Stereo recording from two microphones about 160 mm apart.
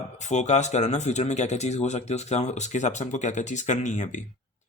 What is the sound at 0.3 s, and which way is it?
Speech, 45° left (ahead or behind).